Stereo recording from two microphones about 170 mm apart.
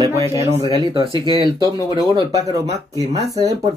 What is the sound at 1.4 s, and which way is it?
Speech, 20° left (ahead or behind).